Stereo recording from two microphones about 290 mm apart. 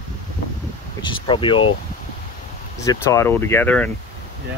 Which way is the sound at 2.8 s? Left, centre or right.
Centre.